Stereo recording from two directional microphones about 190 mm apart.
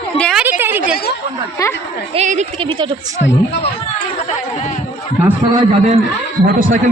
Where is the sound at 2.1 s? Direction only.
40° right (ahead or behind).